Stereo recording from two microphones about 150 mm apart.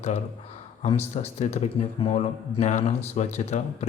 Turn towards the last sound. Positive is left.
turn(degrees=50)  # may be behind; listen again after turning